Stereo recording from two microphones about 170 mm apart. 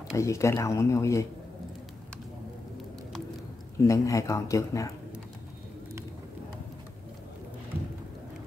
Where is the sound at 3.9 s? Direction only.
20° left (ahead or behind).